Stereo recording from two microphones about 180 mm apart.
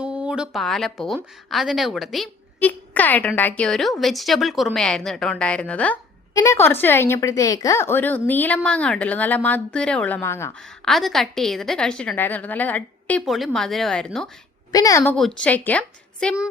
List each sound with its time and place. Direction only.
0.0 s a woman's voice: 5° right (ahead or behind); by 10.5 s 15° left (ahead or behind)
10.8 s speech: centre (ahead or behind)
14.7 s a woman's voice: 20° left (ahead or behind)
15.1 s a woman's voice: 5° left (ahead or behind)